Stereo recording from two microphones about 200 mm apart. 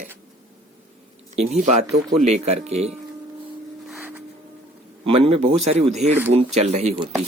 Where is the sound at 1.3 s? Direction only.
35° right (ahead or behind).